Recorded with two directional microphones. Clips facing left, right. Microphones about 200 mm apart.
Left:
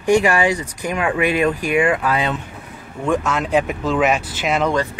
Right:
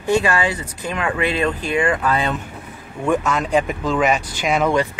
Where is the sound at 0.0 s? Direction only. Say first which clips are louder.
Left 3 dB; 15° left (ahead or behind).